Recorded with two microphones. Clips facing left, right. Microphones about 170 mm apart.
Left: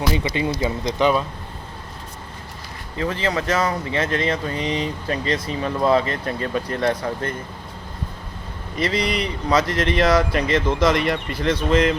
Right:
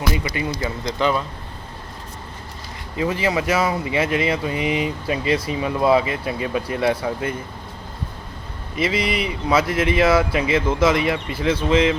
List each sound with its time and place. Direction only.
0.3 s speech: 25° left (ahead or behind)
3.0 s speech: 10° right (ahead or behind)
8.7 s speech: 5° right (ahead or behind)